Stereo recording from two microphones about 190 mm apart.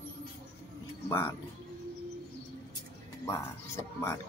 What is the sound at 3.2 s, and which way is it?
Speech, 15° left (ahead or behind).